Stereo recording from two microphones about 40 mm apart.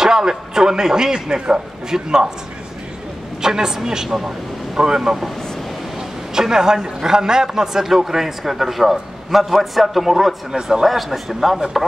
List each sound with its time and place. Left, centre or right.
0.0 s a man's voice: centre
3.4 s a man's voice: centre
10.5 s a man's voice: centre
10.9 s speech: centre